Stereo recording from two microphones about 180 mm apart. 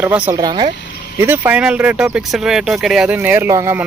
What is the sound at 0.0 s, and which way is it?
Speech, 10° right (ahead or behind).